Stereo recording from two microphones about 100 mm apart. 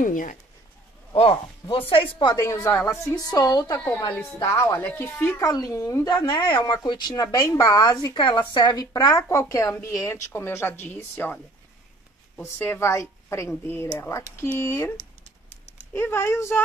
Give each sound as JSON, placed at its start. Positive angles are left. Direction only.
{"t": 1.1, "sound": "speech", "side_deg": 60}
{"t": 2.3, "sound": "speech", "side_deg": 30}
{"t": 3.3, "sound": "speech", "side_deg": 40}
{"t": 5.4, "sound": "speech", "side_deg": 35}
{"t": 6.0, "sound": "a woman's voice", "side_deg": 45}
{"t": 8.1, "sound": "speech", "side_deg": 55}
{"t": 12.4, "sound": "speech", "side_deg": 25}
{"t": 15.9, "sound": "speech", "side_deg": 20}